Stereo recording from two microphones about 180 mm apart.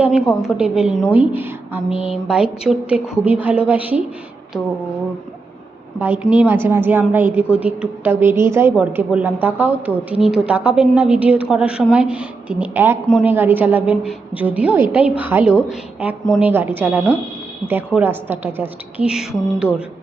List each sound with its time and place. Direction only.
0.0 s a woman's voice: 5° right (ahead or behind)
1.9 s speech: 30° left (ahead or behind)
2.2 s a woman's voice: 5° right (ahead or behind)
6.0 s a woman's voice: 10° right (ahead or behind)